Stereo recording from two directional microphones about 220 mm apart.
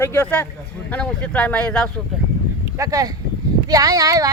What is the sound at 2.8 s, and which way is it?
Speech, 15° right (ahead or behind).